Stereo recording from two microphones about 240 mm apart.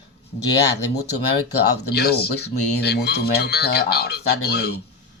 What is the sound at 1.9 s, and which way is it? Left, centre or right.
Speech, left.